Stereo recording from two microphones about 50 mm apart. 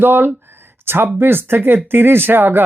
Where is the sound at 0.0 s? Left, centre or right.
Right.